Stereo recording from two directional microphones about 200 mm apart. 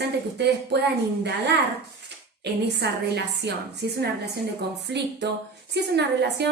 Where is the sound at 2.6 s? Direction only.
55° right (ahead or behind).